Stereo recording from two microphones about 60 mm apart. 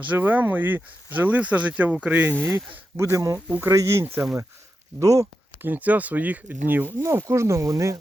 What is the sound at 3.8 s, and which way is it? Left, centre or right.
Speech, right.